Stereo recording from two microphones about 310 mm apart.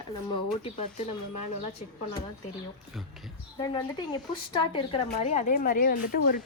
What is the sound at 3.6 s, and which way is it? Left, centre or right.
Speech, centre.